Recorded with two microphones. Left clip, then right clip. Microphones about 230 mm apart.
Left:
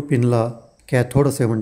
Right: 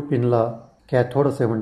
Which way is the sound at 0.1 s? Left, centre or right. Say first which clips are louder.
Even; left.